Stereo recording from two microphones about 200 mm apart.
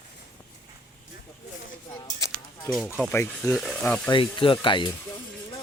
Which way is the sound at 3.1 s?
15° left (ahead or behind).